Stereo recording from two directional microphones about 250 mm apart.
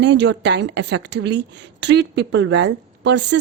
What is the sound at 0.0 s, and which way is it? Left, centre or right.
A woman's voice, right.